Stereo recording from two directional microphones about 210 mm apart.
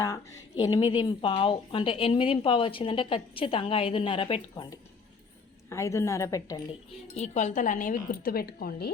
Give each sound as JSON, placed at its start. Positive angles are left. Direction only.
{"t": 0.6, "sound": "a woman's voice", "side_deg": 20}
{"t": 7.1, "sound": "speech", "side_deg": 35}